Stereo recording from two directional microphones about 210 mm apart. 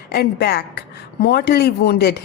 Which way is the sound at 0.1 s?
50° left (ahead or behind).